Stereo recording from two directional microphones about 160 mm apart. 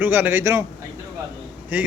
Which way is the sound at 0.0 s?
15° right (ahead or behind).